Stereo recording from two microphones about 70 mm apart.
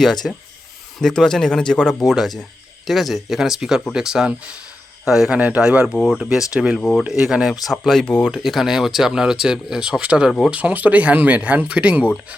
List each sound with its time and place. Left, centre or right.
0.2 s speech: centre
2.0 s speech: centre
5.0 s speech: centre
5.3 s speech: centre
6.0 s speech: centre
6.5 s speech: centre
7.6 s speech: centre
8.0 s speech: centre
8.3 s speech: centre